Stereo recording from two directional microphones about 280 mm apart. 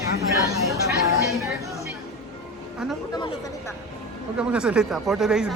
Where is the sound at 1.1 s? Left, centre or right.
Centre.